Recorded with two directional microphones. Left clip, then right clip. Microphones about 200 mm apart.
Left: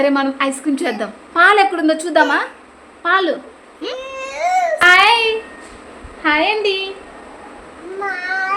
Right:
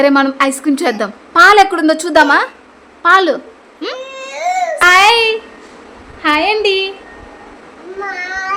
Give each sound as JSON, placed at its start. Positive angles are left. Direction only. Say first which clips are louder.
{"t": 0.0, "sound": "a woman's voice", "louder": "right 5 dB", "side_deg": -35}
{"t": 3.9, "sound": "baby cry", "louder": "right 1 dB", "side_deg": 0}
{"t": 4.8, "sound": "child singing", "louder": "right 3 dB", "side_deg": -35}
{"t": 6.2, "sound": "a woman's voice", "louder": "right 3 dB", "side_deg": -40}
{"t": 8.0, "sound": "cat", "louder": "even", "side_deg": 5}